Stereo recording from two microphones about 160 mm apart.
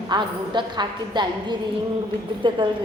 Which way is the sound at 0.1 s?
30° right (ahead or behind).